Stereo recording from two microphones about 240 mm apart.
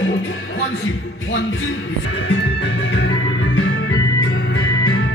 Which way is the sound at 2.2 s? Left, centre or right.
Left.